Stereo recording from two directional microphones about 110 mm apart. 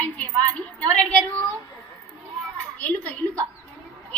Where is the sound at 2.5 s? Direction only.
15° left (ahead or behind).